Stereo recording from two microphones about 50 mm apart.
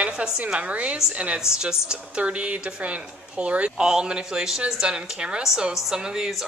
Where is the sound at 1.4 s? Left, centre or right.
Centre.